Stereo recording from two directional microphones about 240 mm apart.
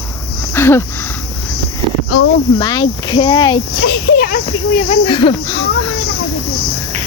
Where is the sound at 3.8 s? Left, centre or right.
Left.